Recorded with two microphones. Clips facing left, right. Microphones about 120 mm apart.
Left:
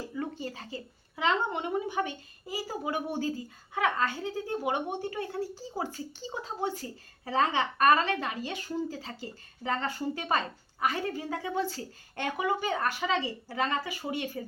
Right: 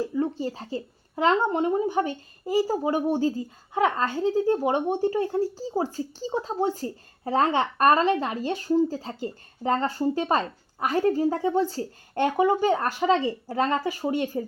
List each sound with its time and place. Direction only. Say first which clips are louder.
0.2 s speech: right 8 dB; 25° right (ahead or behind)
1.1 s speech: right 7 dB; 40° right (ahead or behind)